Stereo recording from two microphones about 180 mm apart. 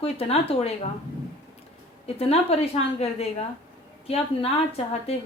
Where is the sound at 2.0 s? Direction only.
35° left (ahead or behind).